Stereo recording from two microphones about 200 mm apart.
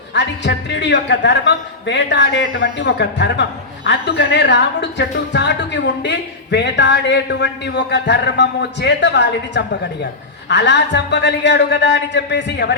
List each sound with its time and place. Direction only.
0.1 s speech: 60° left (ahead or behind)